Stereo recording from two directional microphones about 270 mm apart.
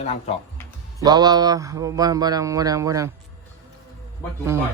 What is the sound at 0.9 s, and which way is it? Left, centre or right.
Speech, centre.